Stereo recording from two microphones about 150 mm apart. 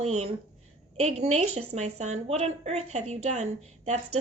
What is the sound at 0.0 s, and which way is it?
A woman's voice, 45° right (ahead or behind).